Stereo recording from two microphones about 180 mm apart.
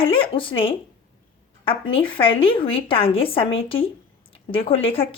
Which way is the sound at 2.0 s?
30° left (ahead or behind).